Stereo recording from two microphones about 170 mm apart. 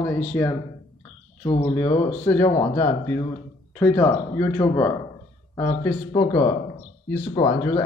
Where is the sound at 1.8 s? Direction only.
35° left (ahead or behind).